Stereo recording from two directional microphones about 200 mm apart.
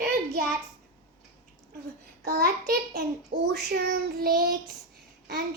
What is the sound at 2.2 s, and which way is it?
A woman's voice, 50° right (ahead or behind).